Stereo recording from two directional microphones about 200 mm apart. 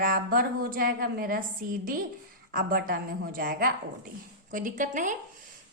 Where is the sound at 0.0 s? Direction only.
45° right (ahead or behind).